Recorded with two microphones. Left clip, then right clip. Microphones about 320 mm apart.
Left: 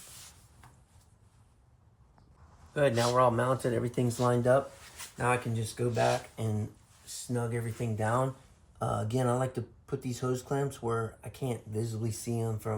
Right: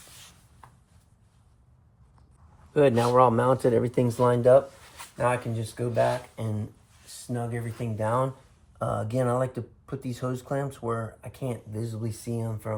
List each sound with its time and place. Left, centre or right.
2.7 s speech: centre
5.7 s speech: centre